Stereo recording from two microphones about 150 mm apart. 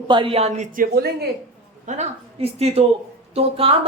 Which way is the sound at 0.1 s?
35° right (ahead or behind).